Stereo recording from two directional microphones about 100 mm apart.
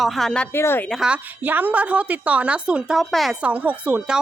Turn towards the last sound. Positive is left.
turn(degrees=-10)  # may be behind; listen again after turning